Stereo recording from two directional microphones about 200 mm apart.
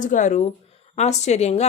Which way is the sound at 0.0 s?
40° left (ahead or behind).